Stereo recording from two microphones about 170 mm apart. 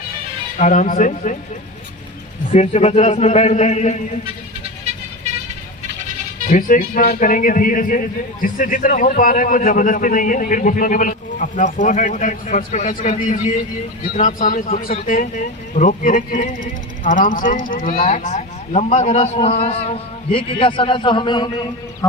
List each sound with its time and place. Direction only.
0.6 s a man's voice: 50° left (ahead or behind)
2.5 s speech: 40° left (ahead or behind)
6.5 s a man's voice: 50° left (ahead or behind); by 21.7 s 25° left (ahead or behind)